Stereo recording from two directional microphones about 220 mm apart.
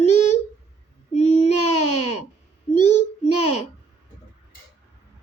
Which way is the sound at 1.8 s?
90° left.